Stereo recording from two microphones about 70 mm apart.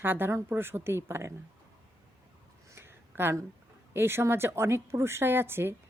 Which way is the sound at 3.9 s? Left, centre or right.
Right.